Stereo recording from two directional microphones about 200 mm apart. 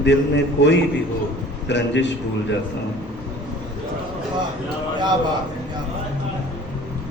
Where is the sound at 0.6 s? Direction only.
60° left (ahead or behind).